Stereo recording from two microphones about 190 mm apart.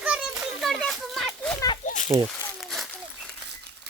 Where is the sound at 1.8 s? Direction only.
40° left (ahead or behind).